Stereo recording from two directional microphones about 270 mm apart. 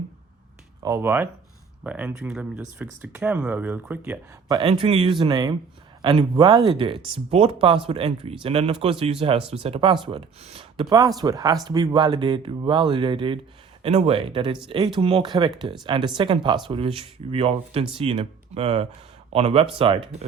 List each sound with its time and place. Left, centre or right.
0.8 s speech: centre